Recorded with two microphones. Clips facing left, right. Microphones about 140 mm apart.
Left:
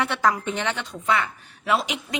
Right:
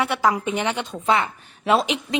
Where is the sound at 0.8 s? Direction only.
25° right (ahead or behind).